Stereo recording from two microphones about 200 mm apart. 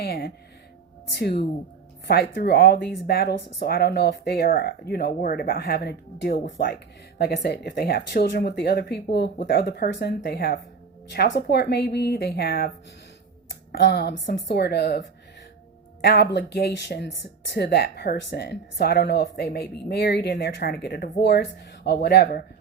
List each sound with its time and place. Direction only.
0.0 s speech: 55° left (ahead or behind)
13.7 s speech: 55° left (ahead or behind)